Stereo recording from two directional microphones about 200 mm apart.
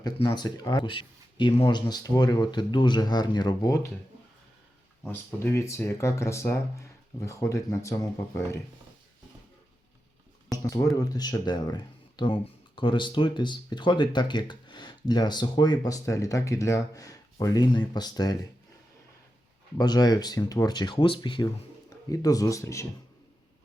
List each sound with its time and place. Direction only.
0.0 s speech: 20° left (ahead or behind)
5.0 s speech: 10° left (ahead or behind)
10.6 s speech: 15° left (ahead or behind)
19.7 s speech: 20° left (ahead or behind)